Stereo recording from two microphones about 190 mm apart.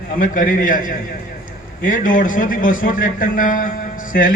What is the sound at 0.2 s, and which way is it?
A man's voice, 45° left (ahead or behind).